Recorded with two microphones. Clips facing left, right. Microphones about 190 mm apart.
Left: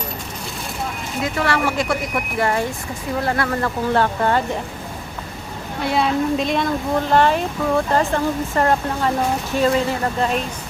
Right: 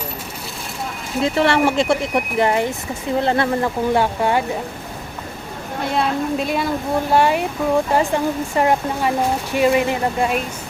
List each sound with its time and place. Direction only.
1.2 s speech: 25° right (ahead or behind)
5.9 s a woman's voice: centre (ahead or behind)